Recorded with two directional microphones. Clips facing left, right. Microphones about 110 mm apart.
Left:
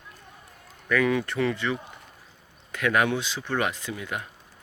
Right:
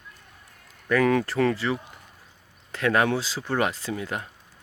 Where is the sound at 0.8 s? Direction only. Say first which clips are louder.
Right 2 dB; 35° right (ahead or behind).